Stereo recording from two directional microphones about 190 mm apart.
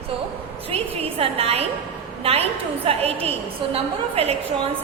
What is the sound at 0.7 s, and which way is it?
A woman's voice, 30° right (ahead or behind).